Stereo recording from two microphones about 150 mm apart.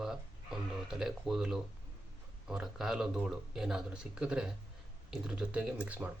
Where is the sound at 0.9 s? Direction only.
5° right (ahead or behind).